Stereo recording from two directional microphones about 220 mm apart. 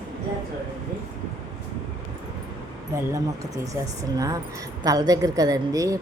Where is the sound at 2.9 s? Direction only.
15° right (ahead or behind).